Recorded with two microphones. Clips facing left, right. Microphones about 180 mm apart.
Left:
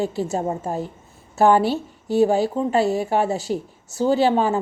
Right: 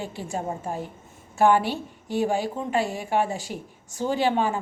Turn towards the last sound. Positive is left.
turn(degrees=40)  # may be behind; listen again after turning